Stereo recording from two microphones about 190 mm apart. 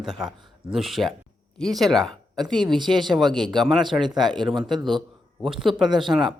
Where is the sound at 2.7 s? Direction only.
25° right (ahead or behind).